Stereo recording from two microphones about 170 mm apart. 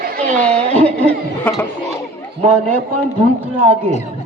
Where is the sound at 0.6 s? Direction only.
35° right (ahead or behind).